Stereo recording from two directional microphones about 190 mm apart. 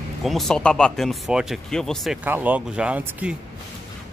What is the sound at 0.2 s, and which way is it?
Speech, centre (ahead or behind).